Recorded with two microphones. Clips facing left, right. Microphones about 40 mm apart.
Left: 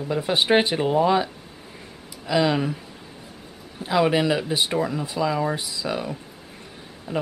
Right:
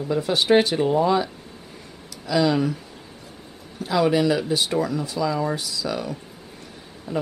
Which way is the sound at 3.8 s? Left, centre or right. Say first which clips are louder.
Even; left.